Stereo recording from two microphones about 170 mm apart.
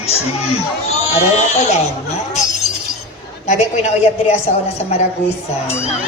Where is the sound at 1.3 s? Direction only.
40° left (ahead or behind).